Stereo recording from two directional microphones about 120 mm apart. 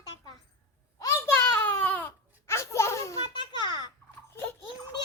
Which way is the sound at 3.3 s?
40° left (ahead or behind).